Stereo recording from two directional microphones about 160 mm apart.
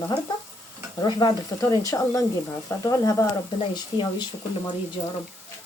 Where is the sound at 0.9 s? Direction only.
25° left (ahead or behind).